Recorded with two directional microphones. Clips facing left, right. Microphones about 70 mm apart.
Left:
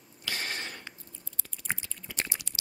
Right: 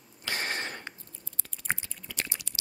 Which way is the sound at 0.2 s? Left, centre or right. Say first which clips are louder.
Right 3 dB; right.